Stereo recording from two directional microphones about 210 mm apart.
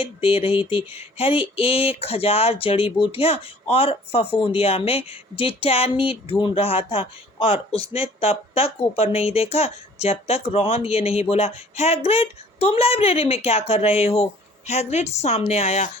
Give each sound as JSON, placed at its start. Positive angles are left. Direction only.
{"t": 0.0, "sound": "a woman's voice", "side_deg": 25}